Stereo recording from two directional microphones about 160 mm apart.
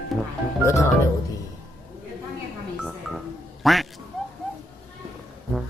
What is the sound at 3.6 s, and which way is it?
Quack, centre (ahead or behind).